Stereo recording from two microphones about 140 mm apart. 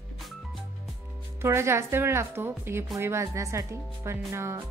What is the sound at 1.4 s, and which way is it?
Speech, 20° right (ahead or behind).